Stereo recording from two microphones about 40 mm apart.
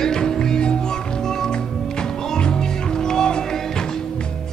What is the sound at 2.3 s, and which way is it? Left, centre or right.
Music, centre.